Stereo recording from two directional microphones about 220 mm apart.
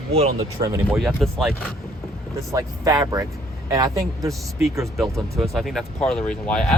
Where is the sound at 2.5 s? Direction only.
15° right (ahead or behind).